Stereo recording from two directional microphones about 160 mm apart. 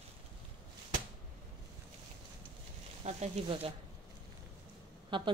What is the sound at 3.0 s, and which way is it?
Speech, 45° right (ahead or behind).